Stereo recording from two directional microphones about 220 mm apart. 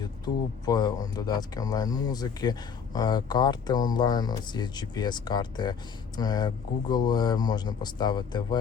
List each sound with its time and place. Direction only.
0.6 s speech: 20° left (ahead or behind)